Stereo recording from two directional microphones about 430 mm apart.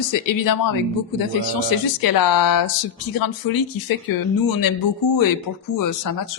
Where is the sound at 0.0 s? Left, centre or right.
Left.